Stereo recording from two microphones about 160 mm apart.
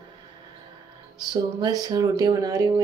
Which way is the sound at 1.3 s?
25° right (ahead or behind).